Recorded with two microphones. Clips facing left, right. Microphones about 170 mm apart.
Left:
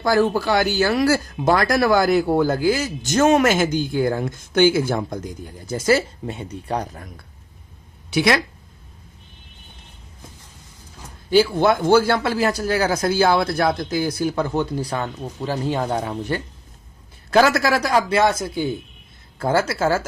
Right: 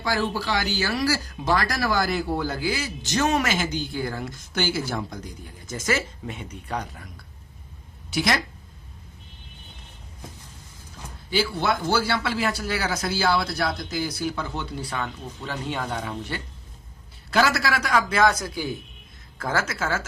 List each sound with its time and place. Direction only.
0.0 s speech: 50° left (ahead or behind)
8.1 s speech: 65° left (ahead or behind)
11.3 s speech: 50° left (ahead or behind)